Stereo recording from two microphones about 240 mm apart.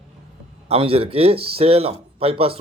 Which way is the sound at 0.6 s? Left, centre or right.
Right.